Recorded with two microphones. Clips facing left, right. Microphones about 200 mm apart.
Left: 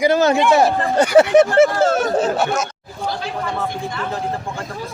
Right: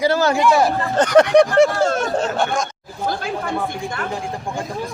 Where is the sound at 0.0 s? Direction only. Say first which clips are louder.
Left 2 dB; 20° left (ahead or behind).